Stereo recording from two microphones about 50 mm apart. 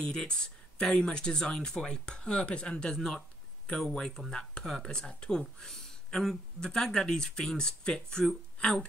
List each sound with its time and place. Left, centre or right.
0.0 s speech: centre